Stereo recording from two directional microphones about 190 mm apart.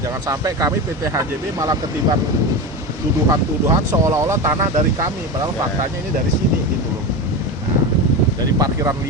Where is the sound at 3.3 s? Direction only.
15° right (ahead or behind).